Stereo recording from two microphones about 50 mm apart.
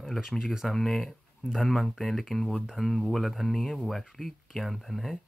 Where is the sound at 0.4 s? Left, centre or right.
Centre.